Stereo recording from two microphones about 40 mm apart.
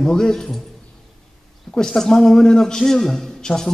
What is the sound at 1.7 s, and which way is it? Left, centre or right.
A man's voice, centre.